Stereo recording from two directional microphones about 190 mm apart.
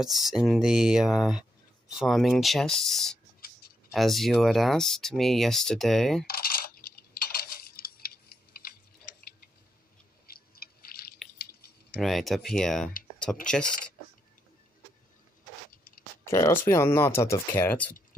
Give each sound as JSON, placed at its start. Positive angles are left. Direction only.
{"t": 0.0, "sound": "speech", "side_deg": 0}
{"t": 6.2, "sound": "coin", "side_deg": 50}
{"t": 10.2, "sound": "a sound", "side_deg": 50}
{"t": 12.0, "sound": "speech", "side_deg": 0}
{"t": 15.7, "sound": "a sound", "side_deg": 50}
{"t": 16.3, "sound": "speech", "side_deg": 15}